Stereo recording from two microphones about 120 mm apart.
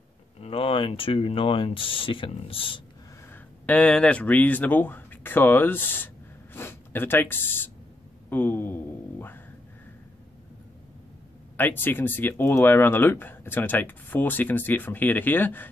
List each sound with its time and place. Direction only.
0.4 s speech: 50° left (ahead or behind)
3.6 s speech: 10° left (ahead or behind)
11.5 s speech: 15° left (ahead or behind)